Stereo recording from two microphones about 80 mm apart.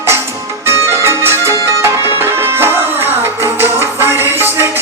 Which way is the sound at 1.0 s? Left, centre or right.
Right.